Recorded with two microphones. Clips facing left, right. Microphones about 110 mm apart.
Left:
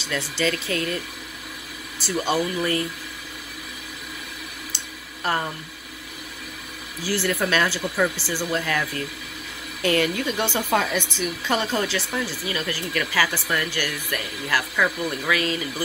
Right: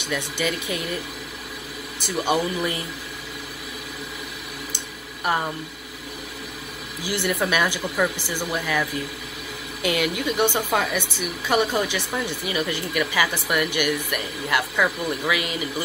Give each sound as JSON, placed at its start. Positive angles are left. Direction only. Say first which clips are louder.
{"t": 0.0, "sound": "speech", "louder": "left 1 dB", "side_deg": -15}
{"t": 2.0, "sound": "speech", "louder": "right 1 dB", "side_deg": -15}
{"t": 4.7, "sound": "a sound", "louder": "right 2 dB", "side_deg": -10}
{"t": 7.0, "sound": "speech", "louder": "even", "side_deg": -15}